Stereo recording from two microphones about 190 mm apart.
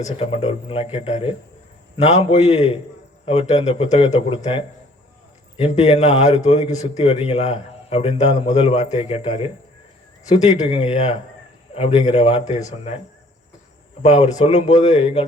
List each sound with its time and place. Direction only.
0.0 s a man's voice: 35° left (ahead or behind)
5.5 s a man's voice: 35° left (ahead or behind)
14.0 s a man's voice: 35° left (ahead or behind)